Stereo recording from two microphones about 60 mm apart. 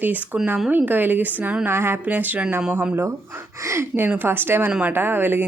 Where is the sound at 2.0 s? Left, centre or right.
Right.